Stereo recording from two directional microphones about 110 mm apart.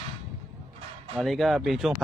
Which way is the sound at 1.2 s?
Centre (ahead or behind).